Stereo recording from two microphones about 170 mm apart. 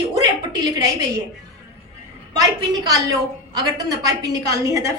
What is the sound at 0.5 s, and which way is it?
Speech, 25° right (ahead or behind).